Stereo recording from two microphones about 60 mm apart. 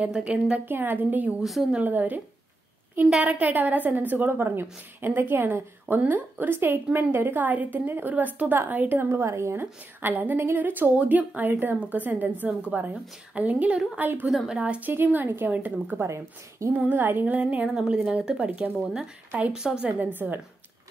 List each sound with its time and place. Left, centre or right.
0.0 s speech: right
0.7 s a woman's voice: right
1.4 s speech: centre
1.8 s a woman's voice: right
9.1 s a woman's voice: right
10.0 s a woman's voice: right
16.0 s a woman's voice: right
16.7 s a woman's voice: right
17.4 s speech: right
17.6 s a woman's voice: centre
18.4 s speech: right
19.5 s a woman's voice: centre
20.0 s a woman's voice: right